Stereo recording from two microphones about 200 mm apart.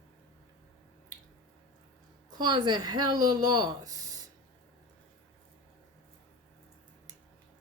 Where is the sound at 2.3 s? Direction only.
20° right (ahead or behind).